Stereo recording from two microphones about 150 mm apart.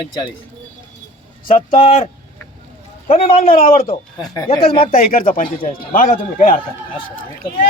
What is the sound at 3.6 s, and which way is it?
A man's voice, 70° left (ahead or behind).